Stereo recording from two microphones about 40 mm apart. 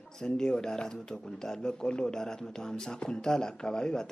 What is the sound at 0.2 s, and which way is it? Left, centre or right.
Speech, centre.